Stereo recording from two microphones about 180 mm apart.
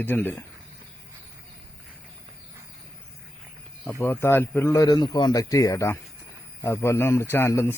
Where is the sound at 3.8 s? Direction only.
15° left (ahead or behind).